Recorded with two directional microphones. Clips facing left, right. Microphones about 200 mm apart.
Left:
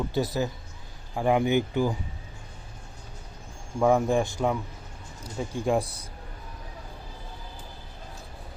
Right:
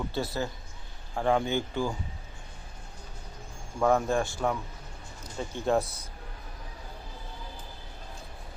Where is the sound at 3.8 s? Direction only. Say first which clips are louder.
Left 3 dB; 15° left (ahead or behind).